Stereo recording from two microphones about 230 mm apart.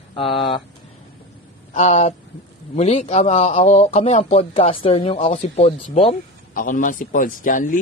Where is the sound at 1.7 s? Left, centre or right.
Left.